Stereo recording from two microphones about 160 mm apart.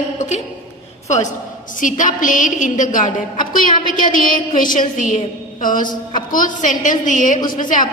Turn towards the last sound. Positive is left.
turn(degrees=55)  # may be behind; listen again after turning